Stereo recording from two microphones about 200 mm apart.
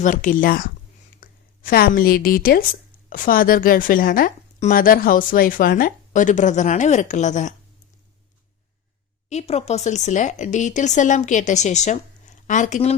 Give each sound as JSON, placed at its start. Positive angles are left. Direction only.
{"t": 0.0, "sound": "a woman's voice", "side_deg": 40}
{"t": 9.3, "sound": "speech", "side_deg": 30}